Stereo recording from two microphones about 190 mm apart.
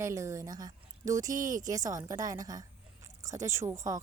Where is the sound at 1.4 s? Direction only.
45° right (ahead or behind).